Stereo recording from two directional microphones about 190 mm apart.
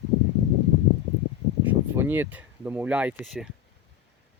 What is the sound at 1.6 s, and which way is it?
Speech, 10° right (ahead or behind).